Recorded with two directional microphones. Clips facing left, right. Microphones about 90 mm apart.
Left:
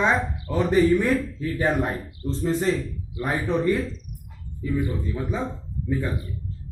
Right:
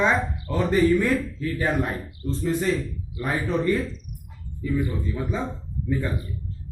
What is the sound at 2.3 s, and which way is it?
Speech, 35° left (ahead or behind).